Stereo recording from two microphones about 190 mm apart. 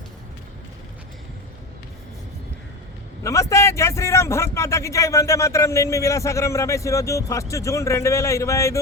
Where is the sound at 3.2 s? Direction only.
15° left (ahead or behind).